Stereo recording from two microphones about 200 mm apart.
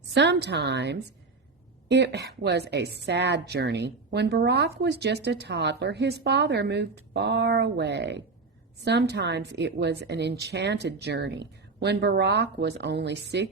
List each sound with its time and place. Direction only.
0.1 s a woman's voice: 60° right (ahead or behind)